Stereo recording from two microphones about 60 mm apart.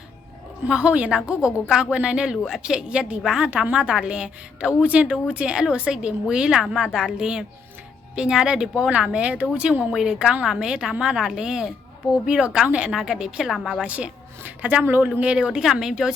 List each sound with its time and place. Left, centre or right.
0.7 s a woman's voice: centre
1.9 s a woman's voice: centre
2.7 s a woman's voice: centre
12.9 s a woman's voice: centre
13.5 s a woman's voice: centre
13.8 s a woman's voice: centre